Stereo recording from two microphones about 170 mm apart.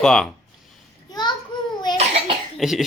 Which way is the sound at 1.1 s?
25° left (ahead or behind).